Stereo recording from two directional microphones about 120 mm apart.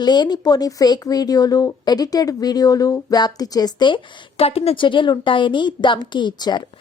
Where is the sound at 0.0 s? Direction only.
35° left (ahead or behind).